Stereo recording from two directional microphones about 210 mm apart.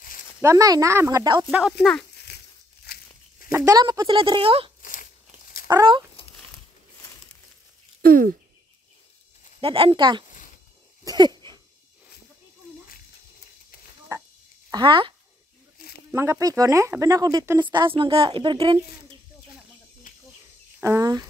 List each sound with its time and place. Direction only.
0.4 s speech: 15° right (ahead or behind)
1.5 s speech: centre (ahead or behind)
2.3 s crumpling: 50° left (ahead or behind)
2.8 s a sound: 45° left (ahead or behind)
3.5 s speech: 15° right (ahead or behind)
8.0 s speech: 45° right (ahead or behind)
9.6 s speech: 25° right (ahead or behind)
11.1 s dog: 20° right (ahead or behind)
14.7 s speech: 25° right (ahead or behind)
16.1 s speech: 10° right (ahead or behind)
20.8 s speech: 15° right (ahead or behind)